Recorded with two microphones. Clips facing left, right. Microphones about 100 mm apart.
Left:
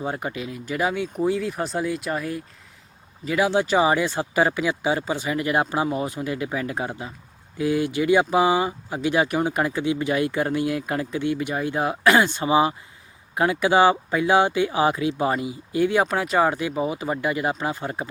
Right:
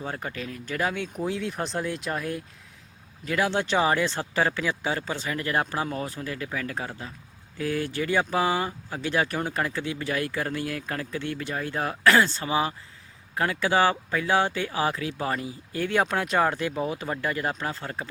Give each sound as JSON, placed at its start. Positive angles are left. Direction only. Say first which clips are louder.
{"t": 0.0, "sound": "speech", "louder": "left 5 dB", "side_deg": 15}